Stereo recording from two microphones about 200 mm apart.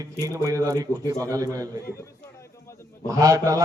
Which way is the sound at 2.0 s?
15° left (ahead or behind).